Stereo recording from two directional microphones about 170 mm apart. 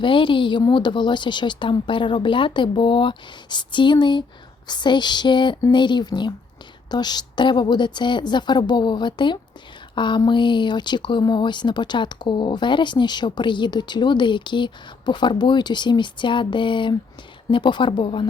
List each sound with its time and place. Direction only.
0.0 s speech: 30° left (ahead or behind)